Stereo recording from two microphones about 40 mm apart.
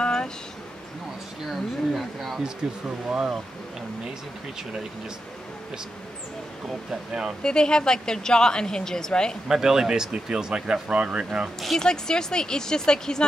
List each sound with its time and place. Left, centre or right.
0.0 s a sound: left
1.4 s a sound: centre
2.6 s speech: centre
6.9 s speech: centre
7.4 s a woman's voice: left
9.5 s speech: centre; by 11.2 s right
11.8 s speech: centre